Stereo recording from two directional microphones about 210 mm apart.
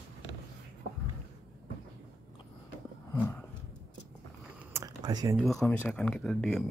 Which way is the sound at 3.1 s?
10° left (ahead or behind).